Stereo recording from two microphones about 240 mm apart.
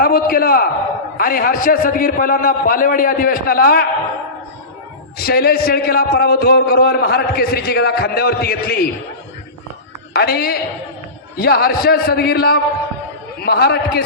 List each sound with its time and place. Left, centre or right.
0.0 s a man's voice: left
5.1 s a man's voice: left
10.1 s a man's voice: left